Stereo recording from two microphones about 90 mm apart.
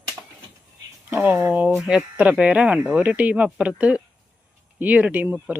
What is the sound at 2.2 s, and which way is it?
Speech, 15° right (ahead or behind).